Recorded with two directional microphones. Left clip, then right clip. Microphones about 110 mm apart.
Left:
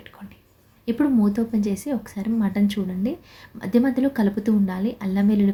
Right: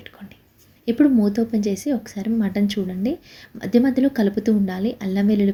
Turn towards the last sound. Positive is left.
turn(degrees=-20)  # may be behind; listen again after turning